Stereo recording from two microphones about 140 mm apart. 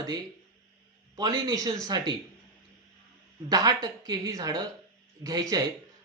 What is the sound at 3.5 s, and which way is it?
Speech, 30° right (ahead or behind).